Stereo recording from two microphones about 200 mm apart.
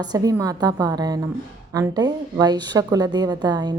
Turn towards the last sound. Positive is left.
turn(degrees=-20)  # may be behind; listen again after turning